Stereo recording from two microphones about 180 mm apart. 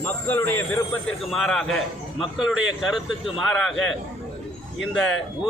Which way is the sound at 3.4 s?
Centre (ahead or behind).